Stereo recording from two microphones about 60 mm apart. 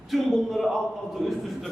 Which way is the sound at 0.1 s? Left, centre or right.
Centre.